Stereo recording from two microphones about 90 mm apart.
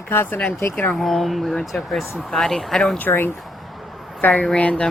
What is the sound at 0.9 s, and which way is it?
Speech, centre (ahead or behind).